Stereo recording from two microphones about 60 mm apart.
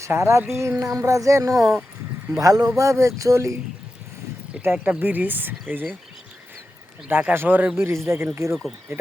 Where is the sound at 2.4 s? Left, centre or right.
Right.